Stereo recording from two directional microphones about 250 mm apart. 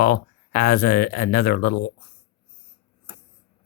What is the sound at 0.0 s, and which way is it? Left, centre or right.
Speech, left.